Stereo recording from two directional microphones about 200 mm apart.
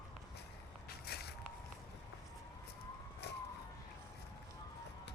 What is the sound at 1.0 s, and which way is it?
Walk, 50° left (ahead or behind).